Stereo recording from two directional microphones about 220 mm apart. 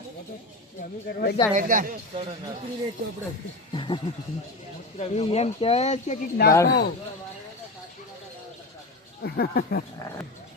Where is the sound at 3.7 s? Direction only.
20° left (ahead or behind).